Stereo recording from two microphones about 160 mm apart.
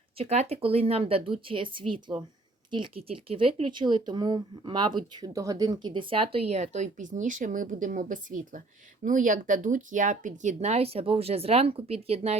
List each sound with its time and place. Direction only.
0.2 s speech: 40° right (ahead or behind)